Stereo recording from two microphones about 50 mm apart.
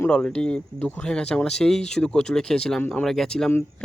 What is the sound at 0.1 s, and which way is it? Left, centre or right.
Speech, left.